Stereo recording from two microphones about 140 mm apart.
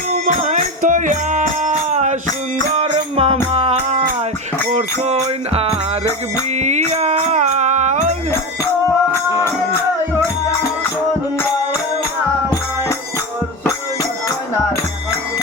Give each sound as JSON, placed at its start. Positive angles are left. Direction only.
{"t": 0.1, "sound": "music", "side_deg": -55}
{"t": 2.7, "sound": "music", "side_deg": -45}